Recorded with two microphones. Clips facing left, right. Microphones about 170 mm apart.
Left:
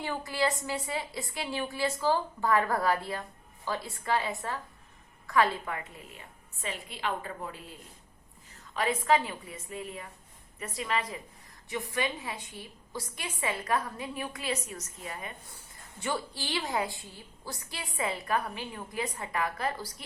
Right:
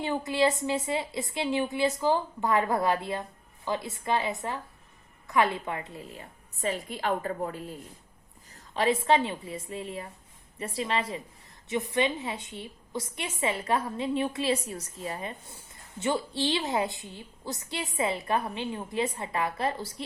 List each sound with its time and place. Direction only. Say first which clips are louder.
0.0 s a woman's voice: right 5 dB; 20° right (ahead or behind); by 7.8 s 45° right (ahead or behind)
8.5 s a woman's voice: right 5 dB; 30° right (ahead or behind)